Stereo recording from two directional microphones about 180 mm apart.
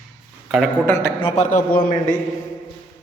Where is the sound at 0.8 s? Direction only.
15° left (ahead or behind).